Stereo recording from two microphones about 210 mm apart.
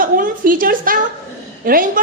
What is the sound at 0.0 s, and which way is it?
A woman's voice, 40° right (ahead or behind).